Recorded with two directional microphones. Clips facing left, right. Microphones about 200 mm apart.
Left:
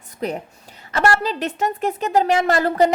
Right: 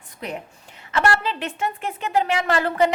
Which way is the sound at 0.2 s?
40° left (ahead or behind).